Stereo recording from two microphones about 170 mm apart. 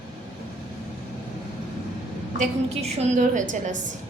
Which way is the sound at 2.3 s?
45° right (ahead or behind).